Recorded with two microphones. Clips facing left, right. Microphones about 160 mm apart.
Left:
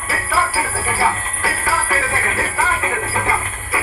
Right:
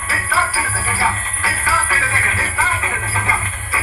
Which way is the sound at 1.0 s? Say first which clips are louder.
Left 2 dB; 45° left (ahead or behind).